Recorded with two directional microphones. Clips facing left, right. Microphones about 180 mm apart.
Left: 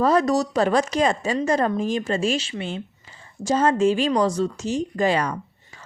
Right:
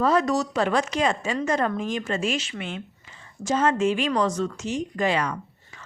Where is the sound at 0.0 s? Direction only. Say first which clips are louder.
Left 3 dB; 40° left (ahead or behind).